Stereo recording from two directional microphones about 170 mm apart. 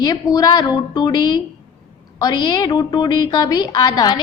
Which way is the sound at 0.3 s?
25° left (ahead or behind).